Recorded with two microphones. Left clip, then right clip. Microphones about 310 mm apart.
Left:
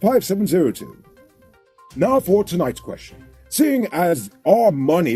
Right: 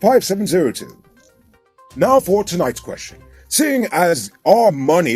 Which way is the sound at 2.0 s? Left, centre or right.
Right.